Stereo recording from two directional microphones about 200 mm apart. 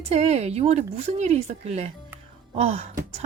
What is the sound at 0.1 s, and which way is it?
Speech, 35° right (ahead or behind).